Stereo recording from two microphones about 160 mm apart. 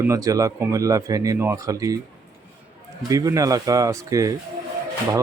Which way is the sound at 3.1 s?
20° right (ahead or behind).